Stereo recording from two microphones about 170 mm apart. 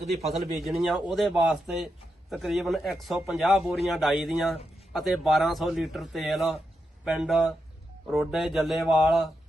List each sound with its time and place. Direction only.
0.3 s a man's voice: centre (ahead or behind)